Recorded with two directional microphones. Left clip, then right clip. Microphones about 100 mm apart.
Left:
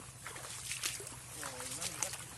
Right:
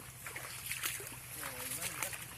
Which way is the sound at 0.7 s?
5° right (ahead or behind).